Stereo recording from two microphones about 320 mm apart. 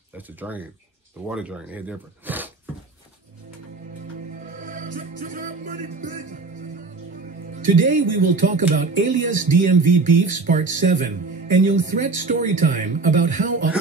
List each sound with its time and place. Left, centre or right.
0.4 s speech: centre
4.4 s music: right
7.5 s speech: right